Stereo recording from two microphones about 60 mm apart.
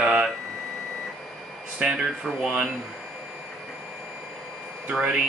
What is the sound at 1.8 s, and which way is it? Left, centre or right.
Speech, centre.